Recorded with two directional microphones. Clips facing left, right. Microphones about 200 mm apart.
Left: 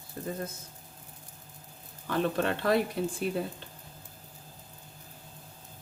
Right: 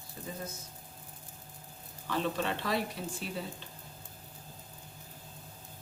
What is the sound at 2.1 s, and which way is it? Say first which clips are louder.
Speech: left 4 dB; 55° left (ahead or behind).